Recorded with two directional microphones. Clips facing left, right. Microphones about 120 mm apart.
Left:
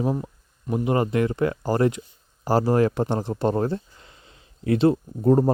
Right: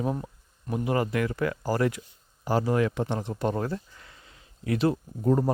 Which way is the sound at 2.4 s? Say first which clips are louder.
Left 5 dB; 40° left (ahead or behind).